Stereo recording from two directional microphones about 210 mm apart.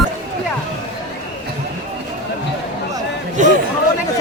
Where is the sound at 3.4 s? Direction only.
35° right (ahead or behind).